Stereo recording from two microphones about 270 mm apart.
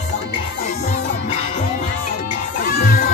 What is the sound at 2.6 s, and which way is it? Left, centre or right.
Music, left.